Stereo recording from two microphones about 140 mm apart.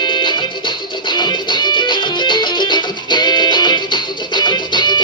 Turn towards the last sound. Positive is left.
turn(degrees=35)  # may be behind; listen again after turning